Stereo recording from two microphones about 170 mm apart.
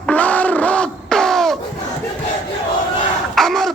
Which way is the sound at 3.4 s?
Centre (ahead or behind).